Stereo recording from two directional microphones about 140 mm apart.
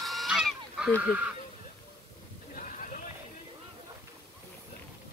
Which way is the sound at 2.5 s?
70° left (ahead or behind).